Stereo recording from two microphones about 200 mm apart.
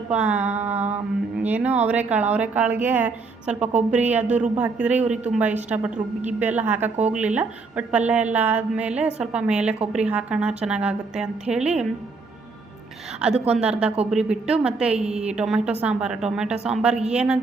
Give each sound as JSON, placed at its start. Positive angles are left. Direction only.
{"t": 0.1, "sound": "a woman's voice", "side_deg": -5}
{"t": 4.2, "sound": "a woman's voice", "side_deg": -35}
{"t": 4.5, "sound": "a woman's voice", "side_deg": -5}
{"t": 13.5, "sound": "a woman's voice", "side_deg": -5}